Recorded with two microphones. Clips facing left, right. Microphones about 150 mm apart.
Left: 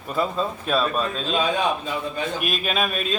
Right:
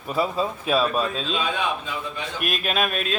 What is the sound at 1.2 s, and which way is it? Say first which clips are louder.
Speech: left 3 dB; 45° left (ahead or behind).